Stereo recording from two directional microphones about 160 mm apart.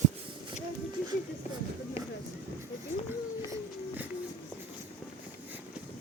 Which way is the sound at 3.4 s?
20° right (ahead or behind).